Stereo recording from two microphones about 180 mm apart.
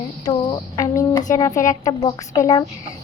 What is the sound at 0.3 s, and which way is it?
A child's voice, 20° left (ahead or behind).